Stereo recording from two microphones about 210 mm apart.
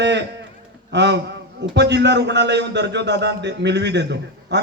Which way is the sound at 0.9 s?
55° right (ahead or behind).